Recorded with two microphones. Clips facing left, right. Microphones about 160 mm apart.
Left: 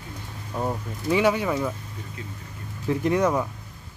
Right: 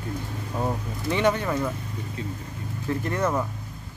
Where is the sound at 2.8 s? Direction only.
15° left (ahead or behind).